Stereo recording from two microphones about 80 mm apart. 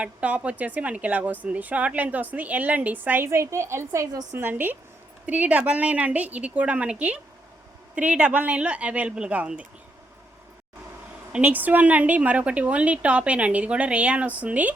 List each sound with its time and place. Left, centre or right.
0.0 s a woman's voice: centre
3.2 s a woman's voice: right
4.1 s a woman's voice: right
4.4 s a woman's voice: right
11.3 s a woman's voice: centre